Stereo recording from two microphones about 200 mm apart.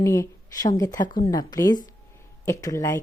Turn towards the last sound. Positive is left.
turn(degrees=15)  # may be behind; listen again after turning